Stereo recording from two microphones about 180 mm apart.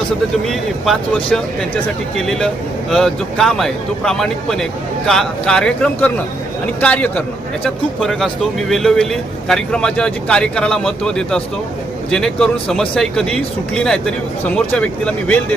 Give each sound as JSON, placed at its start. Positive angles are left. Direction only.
{"t": 0.4, "sound": "a man's voice", "side_deg": 0}